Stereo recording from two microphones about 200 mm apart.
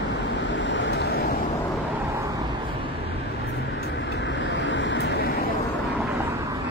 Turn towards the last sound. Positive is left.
turn(degrees=60)  # may be behind; listen again after turning